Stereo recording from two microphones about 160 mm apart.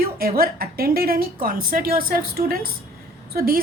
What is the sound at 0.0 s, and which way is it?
A woman's voice, 65° right (ahead or behind).